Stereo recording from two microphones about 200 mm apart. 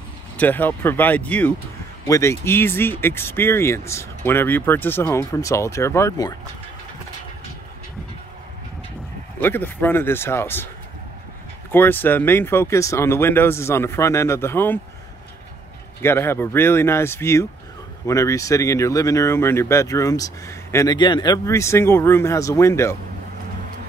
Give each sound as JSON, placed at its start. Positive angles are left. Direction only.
{"t": 0.4, "sound": "speech", "side_deg": 10}
{"t": 9.4, "sound": "speech", "side_deg": 10}
{"t": 11.7, "sound": "speech", "side_deg": 10}
{"t": 16.0, "sound": "speech", "side_deg": 10}